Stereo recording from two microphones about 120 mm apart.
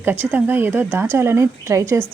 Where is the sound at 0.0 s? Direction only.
15° right (ahead or behind).